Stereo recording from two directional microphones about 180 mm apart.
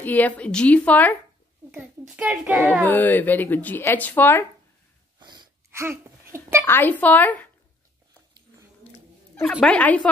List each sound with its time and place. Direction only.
0.0 s speech: 10° left (ahead or behind)
1.7 s a child's voice: 5° right (ahead or behind)
2.8 s speech: 10° left (ahead or behind)
5.2 s sneeze: 25° right (ahead or behind)
6.6 s speech: 10° left (ahead or behind)
9.4 s speech: 5° left (ahead or behind)